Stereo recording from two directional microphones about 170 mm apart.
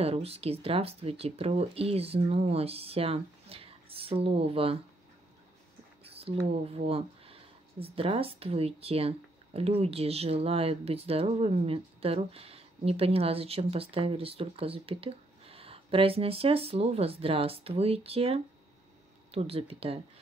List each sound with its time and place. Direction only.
0.0 s speech: 35° right (ahead or behind)
6.0 s a sound: 35° right (ahead or behind)
6.5 s speech: 35° right (ahead or behind)